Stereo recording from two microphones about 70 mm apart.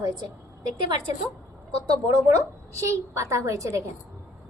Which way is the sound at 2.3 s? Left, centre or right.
Right.